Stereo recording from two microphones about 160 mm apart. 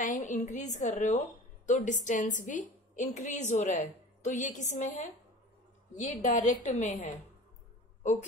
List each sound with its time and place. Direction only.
0.0 s a woman's voice: 55° left (ahead or behind)
5.9 s a woman's voice: 50° left (ahead or behind)
8.0 s a sound: 50° left (ahead or behind)